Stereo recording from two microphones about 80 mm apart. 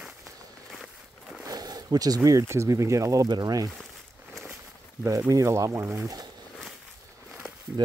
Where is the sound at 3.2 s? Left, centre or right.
Right.